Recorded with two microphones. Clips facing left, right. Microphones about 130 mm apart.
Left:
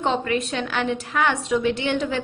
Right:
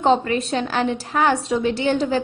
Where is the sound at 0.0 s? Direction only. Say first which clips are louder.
Right 5 dB; 35° right (ahead or behind).